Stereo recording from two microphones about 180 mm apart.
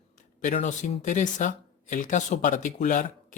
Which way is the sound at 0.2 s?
45° left (ahead or behind).